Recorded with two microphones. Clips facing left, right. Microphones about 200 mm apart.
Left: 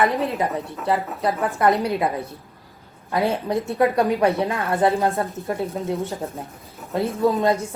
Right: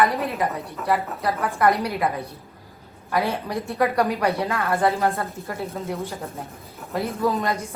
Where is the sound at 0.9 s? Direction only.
25° left (ahead or behind).